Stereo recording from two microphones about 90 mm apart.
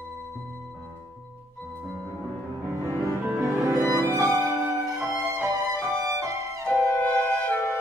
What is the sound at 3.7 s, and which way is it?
Music, 40° right (ahead or behind).